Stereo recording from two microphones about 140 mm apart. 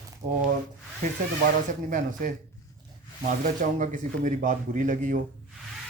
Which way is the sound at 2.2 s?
80° right.